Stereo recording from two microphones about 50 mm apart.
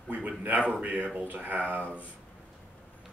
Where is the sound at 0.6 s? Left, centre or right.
Right.